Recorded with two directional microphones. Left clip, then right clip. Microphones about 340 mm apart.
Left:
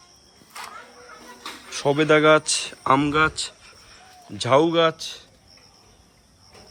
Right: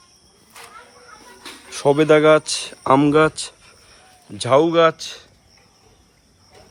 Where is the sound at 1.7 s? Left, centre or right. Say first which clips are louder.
Right 4 dB; centre.